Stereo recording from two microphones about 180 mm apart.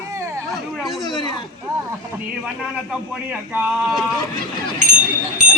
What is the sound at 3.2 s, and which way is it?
Speech, 10° right (ahead or behind).